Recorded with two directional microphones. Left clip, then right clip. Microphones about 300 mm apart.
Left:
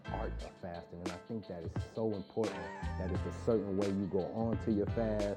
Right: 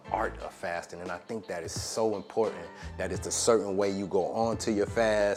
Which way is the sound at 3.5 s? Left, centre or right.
Centre.